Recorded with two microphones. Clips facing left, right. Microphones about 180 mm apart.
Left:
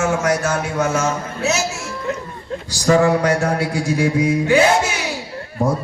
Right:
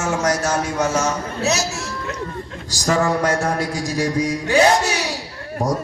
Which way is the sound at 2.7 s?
40° right (ahead or behind).